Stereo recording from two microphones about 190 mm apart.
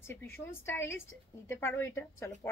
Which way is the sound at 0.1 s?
10° left (ahead or behind).